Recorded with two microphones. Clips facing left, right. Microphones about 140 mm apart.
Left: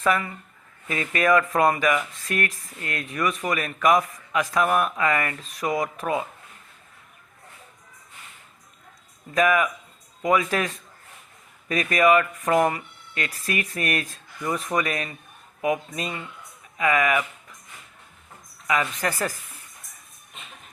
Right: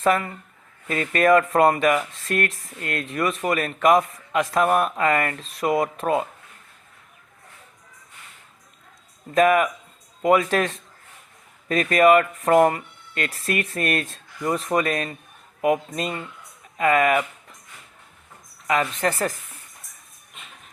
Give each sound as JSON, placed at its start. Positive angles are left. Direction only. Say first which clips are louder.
{"t": 0.0, "sound": "speech", "louder": "right 3 dB", "side_deg": -30}
{"t": 2.5, "sound": "speech", "louder": "right 2 dB", "side_deg": -70}
{"t": 3.0, "sound": "a man's voice", "louder": "right 2 dB", "side_deg": -30}
{"t": 4.9, "sound": "speech", "louder": "right 3 dB", "side_deg": -40}
{"t": 5.4, "sound": "a man's voice", "louder": "right 4 dB", "side_deg": -30}
{"t": 9.3, "sound": "a man's voice", "louder": "right 3 dB", "side_deg": -30}
{"t": 18.7, "sound": "a man's voice", "louder": "right 3 dB", "side_deg": -30}